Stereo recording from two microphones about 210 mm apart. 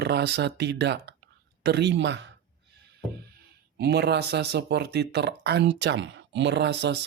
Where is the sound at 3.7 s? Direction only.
50° right (ahead or behind).